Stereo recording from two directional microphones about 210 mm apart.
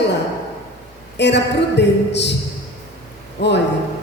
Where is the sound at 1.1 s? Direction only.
55° left (ahead or behind).